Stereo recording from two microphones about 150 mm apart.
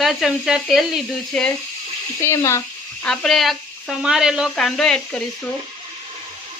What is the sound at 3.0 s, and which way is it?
Frying, centre (ahead or behind).